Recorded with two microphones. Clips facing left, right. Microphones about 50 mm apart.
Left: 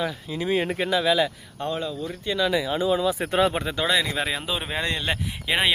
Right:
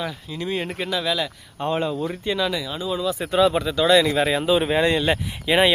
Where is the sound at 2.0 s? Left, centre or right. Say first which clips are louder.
Right 3 dB; centre.